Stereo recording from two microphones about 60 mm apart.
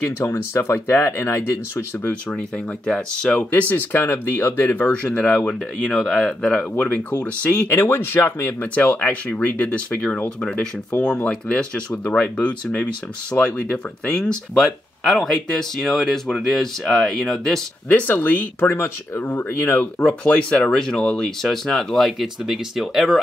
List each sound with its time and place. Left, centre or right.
0.2 s speech: left
2.9 s speech: left
4.6 s speech: left
5.1 s speech: centre
5.5 s speech: centre
6.7 s speech: left
7.7 s speech: left; by 14.4 s centre
14.6 s speech: centre
17.8 s speech: left
20.0 s speech: left; by 23.1 s centre